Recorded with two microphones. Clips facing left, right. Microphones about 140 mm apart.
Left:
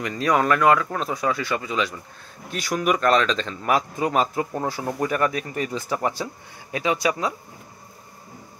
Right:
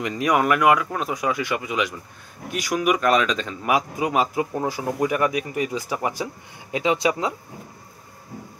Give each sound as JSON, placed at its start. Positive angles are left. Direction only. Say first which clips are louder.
{"t": 0.0, "sound": "speech", "louder": "right 1 dB", "side_deg": -15}